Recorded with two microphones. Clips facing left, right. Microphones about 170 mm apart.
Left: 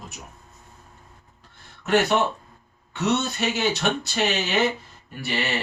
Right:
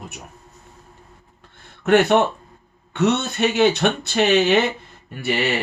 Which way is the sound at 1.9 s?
55° right (ahead or behind).